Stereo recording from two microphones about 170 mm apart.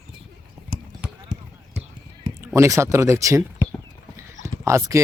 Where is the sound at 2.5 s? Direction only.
15° right (ahead or behind).